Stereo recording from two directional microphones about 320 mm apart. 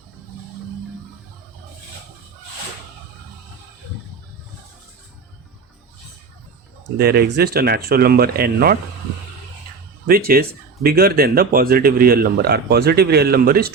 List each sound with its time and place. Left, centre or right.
7.0 s a man's voice: right
10.1 s a man's voice: right